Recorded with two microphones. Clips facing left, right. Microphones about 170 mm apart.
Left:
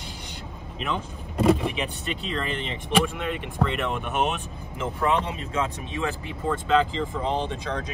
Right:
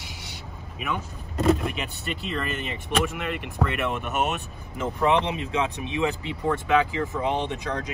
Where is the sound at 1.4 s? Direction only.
5° left (ahead or behind).